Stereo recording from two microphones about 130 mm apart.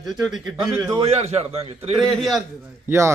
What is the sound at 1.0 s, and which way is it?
Speech, 55° right (ahead or behind).